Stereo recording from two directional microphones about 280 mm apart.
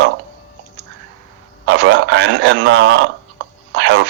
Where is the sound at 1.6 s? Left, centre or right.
Right.